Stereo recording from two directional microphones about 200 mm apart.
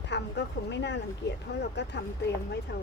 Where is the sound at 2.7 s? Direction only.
60° left (ahead or behind).